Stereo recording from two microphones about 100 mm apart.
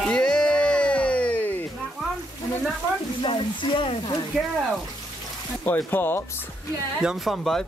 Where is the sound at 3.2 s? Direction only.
55° left (ahead or behind).